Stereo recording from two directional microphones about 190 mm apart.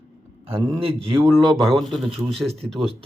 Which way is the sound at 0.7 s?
30° right (ahead or behind).